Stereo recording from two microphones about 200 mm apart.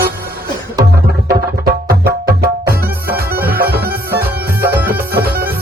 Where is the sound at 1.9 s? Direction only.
50° right (ahead or behind).